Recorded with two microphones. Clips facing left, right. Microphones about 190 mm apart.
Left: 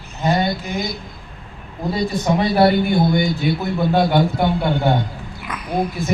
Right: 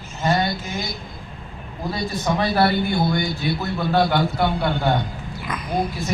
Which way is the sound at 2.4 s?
20° left (ahead or behind).